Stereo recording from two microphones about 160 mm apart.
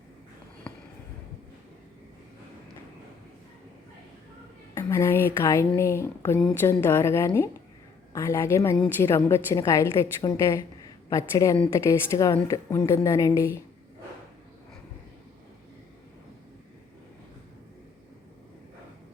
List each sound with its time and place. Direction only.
4.7 s a woman's voice: 15° left (ahead or behind)